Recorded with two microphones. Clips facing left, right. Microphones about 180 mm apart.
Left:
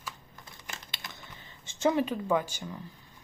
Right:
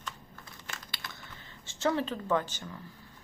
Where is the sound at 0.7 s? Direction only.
20° left (ahead or behind).